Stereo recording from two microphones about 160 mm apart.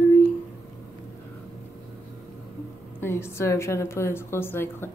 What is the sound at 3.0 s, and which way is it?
Speech, 15° left (ahead or behind).